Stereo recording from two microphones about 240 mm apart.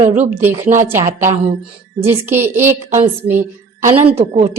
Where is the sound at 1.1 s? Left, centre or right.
Right.